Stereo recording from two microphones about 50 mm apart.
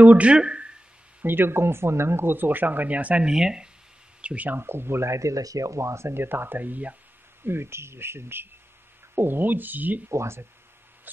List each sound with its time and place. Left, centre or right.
0.0 s speech: right
0.4 s a sound: right
1.2 s speech: right
3.3 s speech: centre
4.2 s a sound: right
4.5 s speech: right
7.4 s speech: right
10.0 s speech: right